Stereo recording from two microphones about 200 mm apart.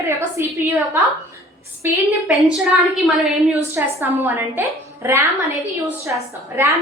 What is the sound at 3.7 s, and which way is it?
A woman's voice, 15° right (ahead or behind).